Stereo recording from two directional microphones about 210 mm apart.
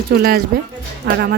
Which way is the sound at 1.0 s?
55° right (ahead or behind).